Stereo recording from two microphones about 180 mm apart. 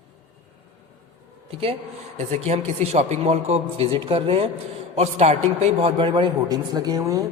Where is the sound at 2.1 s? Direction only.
35° right (ahead or behind).